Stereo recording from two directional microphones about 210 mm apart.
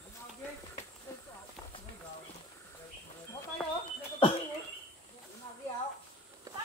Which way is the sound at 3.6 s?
5° left (ahead or behind).